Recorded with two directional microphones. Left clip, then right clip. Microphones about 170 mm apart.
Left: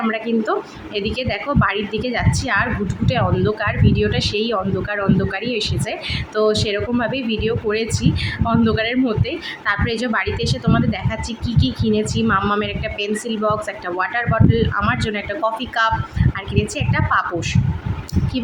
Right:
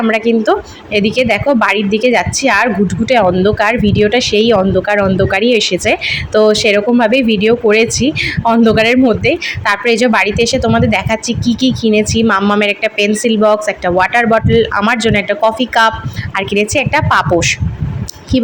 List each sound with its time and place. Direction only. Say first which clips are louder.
0.0 s a woman's voice: right 9 dB; 35° right (ahead or behind)